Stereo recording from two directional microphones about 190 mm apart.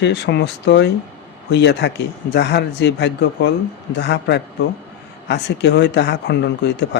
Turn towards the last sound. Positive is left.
turn(degrees=65)  # may be behind; listen again after turning